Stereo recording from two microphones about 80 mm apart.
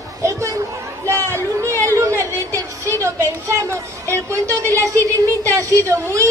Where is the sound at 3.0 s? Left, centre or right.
Right.